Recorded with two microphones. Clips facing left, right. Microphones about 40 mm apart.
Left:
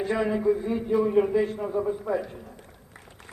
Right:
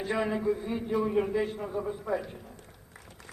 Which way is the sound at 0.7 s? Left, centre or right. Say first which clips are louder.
Left 5 dB; centre.